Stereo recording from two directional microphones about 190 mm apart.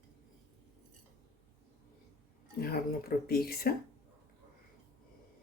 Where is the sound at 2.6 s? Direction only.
55° left (ahead or behind).